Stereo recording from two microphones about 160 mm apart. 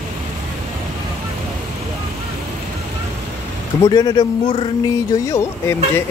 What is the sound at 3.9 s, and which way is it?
Speech, 25° left (ahead or behind).